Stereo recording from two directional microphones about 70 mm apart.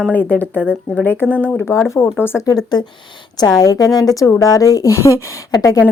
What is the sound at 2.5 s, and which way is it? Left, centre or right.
A woman's voice, left.